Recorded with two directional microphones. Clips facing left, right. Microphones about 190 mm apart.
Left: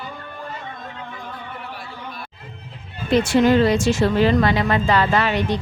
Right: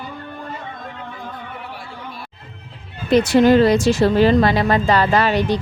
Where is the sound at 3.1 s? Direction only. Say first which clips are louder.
Right 3 dB; 40° right (ahead or behind).